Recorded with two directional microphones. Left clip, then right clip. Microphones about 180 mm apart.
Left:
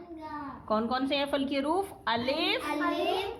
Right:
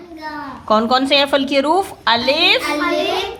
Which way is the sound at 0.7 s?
20° right (ahead or behind).